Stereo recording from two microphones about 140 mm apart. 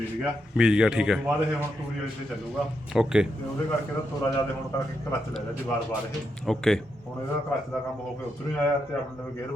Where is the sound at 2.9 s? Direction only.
5° right (ahead or behind).